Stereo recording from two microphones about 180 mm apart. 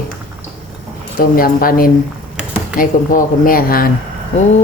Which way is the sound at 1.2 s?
55° left (ahead or behind).